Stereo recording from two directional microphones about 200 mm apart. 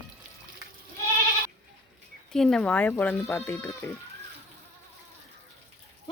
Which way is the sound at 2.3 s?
Centre (ahead or behind).